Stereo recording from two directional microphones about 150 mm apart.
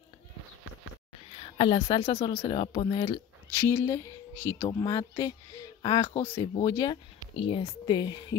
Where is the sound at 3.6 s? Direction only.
15° left (ahead or behind).